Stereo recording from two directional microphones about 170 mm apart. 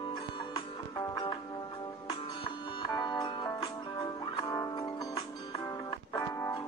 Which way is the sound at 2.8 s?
25° left (ahead or behind).